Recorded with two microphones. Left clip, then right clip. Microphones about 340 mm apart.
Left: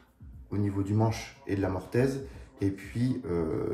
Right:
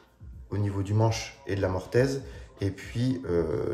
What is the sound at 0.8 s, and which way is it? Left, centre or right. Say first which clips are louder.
Speech: right 2 dB; centre.